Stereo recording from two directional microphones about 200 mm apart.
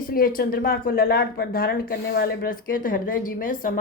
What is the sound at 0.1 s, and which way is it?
A woman's voice, 45° left (ahead or behind).